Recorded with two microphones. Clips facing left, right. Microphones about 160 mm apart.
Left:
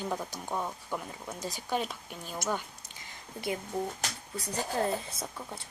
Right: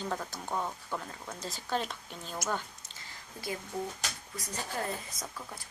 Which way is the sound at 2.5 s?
10° left (ahead or behind).